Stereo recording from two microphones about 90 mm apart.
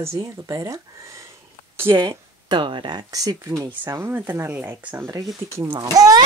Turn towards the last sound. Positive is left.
turn(degrees=-45)  # may be behind; listen again after turning